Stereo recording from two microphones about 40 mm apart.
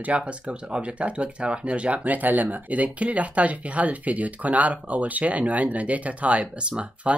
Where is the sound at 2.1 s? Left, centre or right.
Right.